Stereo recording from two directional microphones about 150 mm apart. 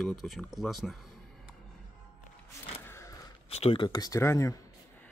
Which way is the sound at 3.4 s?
40° left (ahead or behind).